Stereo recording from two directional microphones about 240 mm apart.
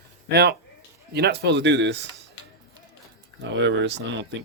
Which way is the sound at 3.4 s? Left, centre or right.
Right.